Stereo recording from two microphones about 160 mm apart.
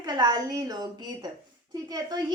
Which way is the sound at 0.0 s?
25° right (ahead or behind).